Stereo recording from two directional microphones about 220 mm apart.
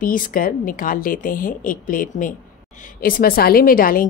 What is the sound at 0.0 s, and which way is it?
A woman's voice, 40° left (ahead or behind).